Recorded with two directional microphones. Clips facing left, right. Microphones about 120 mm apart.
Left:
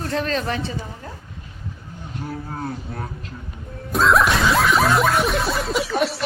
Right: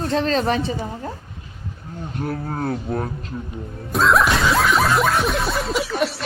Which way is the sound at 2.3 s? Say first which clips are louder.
Right 4 dB; 55° right (ahead or behind).